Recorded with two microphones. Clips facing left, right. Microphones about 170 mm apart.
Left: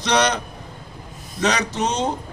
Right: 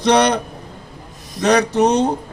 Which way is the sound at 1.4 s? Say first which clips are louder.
Right 7 dB; 60° right (ahead or behind).